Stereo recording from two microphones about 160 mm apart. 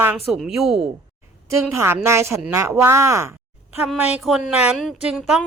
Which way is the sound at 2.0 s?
15° right (ahead or behind).